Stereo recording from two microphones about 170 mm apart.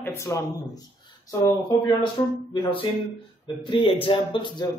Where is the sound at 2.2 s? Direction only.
20° left (ahead or behind).